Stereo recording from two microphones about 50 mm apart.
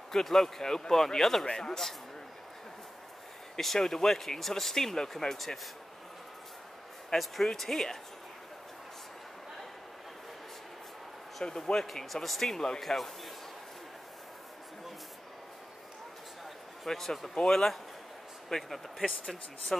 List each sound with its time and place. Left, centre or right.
0.1 s speech: centre
3.5 s speech: centre
7.1 s speech: centre
11.4 s speech: centre
16.8 s speech: centre